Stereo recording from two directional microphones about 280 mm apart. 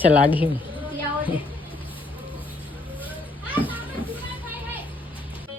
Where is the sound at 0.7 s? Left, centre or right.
Centre.